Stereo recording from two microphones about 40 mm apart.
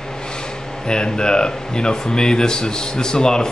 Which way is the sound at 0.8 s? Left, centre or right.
Centre.